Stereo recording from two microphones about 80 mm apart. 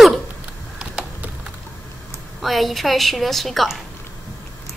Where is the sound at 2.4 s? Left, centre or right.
Centre.